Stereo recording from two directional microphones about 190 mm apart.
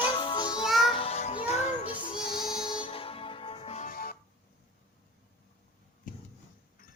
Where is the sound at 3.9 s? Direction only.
50° left (ahead or behind).